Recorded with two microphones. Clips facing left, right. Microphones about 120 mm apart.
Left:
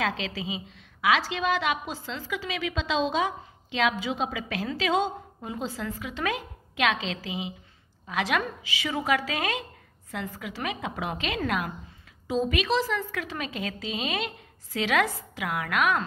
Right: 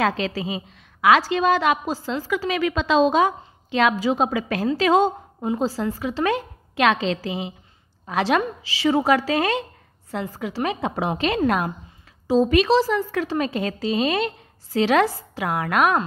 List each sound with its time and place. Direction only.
0.0 s a woman's voice: 45° right (ahead or behind)